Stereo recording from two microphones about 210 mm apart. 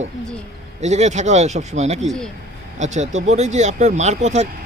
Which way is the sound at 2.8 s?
35° right (ahead or behind).